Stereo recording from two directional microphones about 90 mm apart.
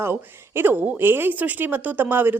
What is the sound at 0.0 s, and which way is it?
A woman's voice, 25° right (ahead or behind).